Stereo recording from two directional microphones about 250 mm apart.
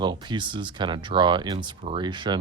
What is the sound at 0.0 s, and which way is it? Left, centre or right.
Speech, centre.